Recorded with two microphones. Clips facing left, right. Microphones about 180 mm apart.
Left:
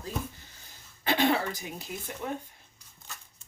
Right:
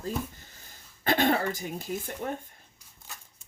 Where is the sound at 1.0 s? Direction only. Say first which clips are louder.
Right 1 dB; 45° right (ahead or behind).